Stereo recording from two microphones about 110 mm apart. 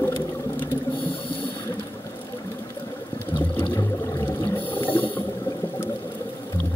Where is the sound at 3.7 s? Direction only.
25° left (ahead or behind).